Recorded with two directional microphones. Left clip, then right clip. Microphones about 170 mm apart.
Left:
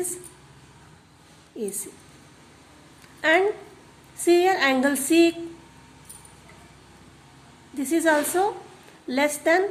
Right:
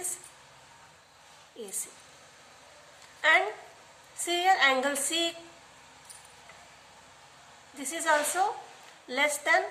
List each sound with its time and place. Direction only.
3.2 s speech: 30° left (ahead or behind)
4.2 s music: 30° left (ahead or behind)
7.8 s music: 30° left (ahead or behind)